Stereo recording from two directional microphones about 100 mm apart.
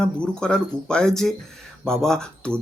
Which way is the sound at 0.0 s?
10° left (ahead or behind).